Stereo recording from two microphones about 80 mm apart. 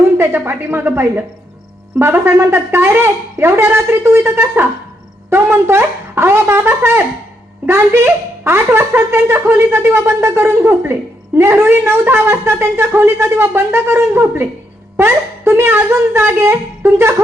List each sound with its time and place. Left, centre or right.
0.2 s a woman's voice: right